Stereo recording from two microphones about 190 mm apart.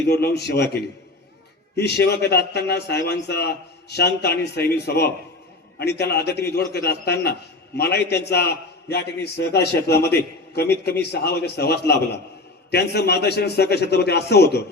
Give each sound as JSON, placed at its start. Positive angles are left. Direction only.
{"t": 0.1, "sound": "a man's voice", "side_deg": 60}